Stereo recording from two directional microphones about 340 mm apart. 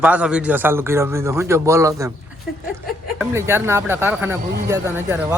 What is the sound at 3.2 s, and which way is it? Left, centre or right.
A man's voice, centre.